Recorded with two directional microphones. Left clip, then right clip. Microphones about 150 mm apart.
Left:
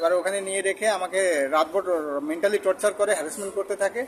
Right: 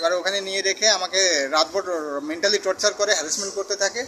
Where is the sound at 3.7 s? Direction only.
20° left (ahead or behind).